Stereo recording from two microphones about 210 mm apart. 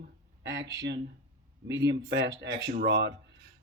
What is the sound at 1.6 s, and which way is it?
Speech, 55° right (ahead or behind).